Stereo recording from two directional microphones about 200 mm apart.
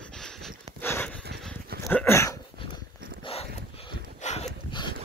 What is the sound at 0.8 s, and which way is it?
Dog, 10° left (ahead or behind).